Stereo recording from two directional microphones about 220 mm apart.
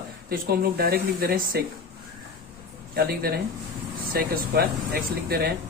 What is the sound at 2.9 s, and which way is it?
Speech, 45° right (ahead or behind).